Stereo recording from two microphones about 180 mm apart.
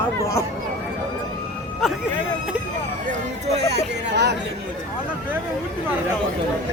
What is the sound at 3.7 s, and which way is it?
Speech, 70° right (ahead or behind).